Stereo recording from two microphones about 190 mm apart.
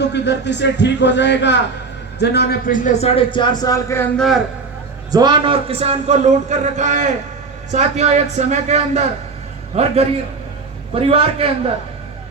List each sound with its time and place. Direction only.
0.0 s a man's voice: 65° left (ahead or behind); by 4.1 s 15° left (ahead or behind)
4.2 s a man's voice: centre (ahead or behind)
5.1 s a man's voice: 25° right (ahead or behind)